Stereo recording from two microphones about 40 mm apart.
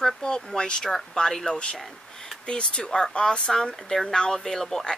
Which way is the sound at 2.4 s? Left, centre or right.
Left.